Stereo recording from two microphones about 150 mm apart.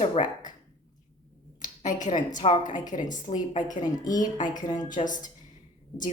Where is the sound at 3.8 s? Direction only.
25° left (ahead or behind).